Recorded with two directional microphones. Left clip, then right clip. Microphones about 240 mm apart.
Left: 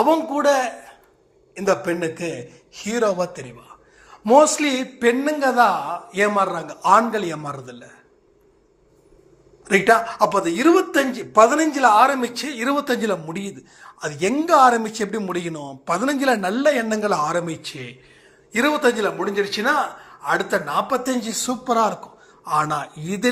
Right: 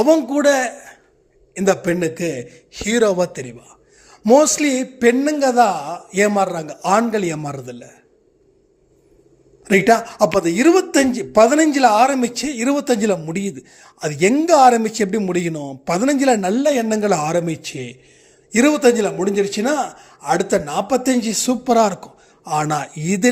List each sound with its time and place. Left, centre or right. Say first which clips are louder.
0.0 s speech: right 3 dB; right
9.6 s speech: right 2 dB; right